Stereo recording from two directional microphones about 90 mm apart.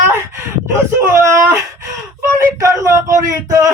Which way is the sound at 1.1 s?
30° right (ahead or behind).